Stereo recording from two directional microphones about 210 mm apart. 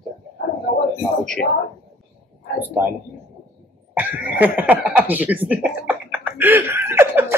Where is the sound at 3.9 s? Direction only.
10° right (ahead or behind).